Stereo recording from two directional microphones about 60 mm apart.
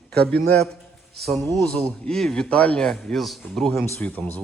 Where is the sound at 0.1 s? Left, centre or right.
Centre.